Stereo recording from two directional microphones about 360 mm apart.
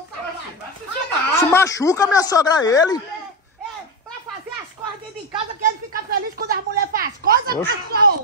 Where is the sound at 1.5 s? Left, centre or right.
Centre.